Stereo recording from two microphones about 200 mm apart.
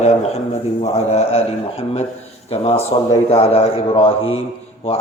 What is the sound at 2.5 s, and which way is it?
A man's voice, 30° left (ahead or behind).